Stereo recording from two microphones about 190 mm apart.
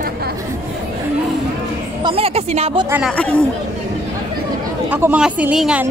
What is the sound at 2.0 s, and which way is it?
Speech, 30° right (ahead or behind).